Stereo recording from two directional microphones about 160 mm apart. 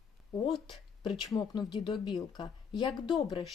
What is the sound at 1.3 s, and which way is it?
A woman's voice, 25° left (ahead or behind).